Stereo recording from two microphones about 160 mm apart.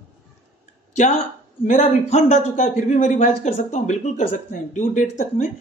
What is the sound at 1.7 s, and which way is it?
Speech, 50° left (ahead or behind).